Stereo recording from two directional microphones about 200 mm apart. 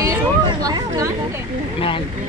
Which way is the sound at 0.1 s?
20° right (ahead or behind).